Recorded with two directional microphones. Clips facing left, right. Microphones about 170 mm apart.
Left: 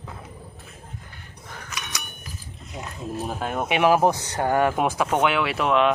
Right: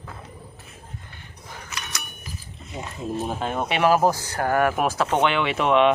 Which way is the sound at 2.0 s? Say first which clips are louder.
Right 1 dB; centre (ahead or behind).